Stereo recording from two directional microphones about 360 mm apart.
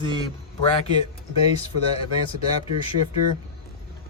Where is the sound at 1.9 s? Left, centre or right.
Centre.